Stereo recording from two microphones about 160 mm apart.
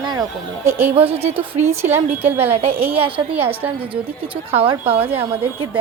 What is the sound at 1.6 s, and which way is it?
Speech, 15° right (ahead or behind).